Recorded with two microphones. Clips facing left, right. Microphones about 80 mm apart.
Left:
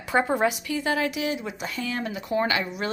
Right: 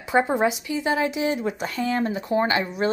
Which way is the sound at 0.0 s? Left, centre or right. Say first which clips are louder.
Right 2 dB; right.